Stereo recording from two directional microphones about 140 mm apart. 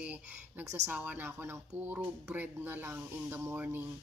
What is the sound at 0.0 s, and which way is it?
Speech, 10° right (ahead or behind).